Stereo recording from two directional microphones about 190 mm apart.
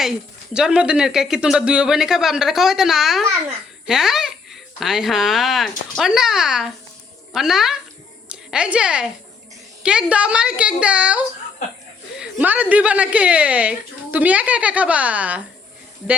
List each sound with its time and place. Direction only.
0.5 s a woman's voice: 5° right (ahead or behind)